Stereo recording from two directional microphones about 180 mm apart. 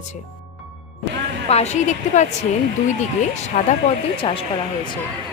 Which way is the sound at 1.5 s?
35° left (ahead or behind).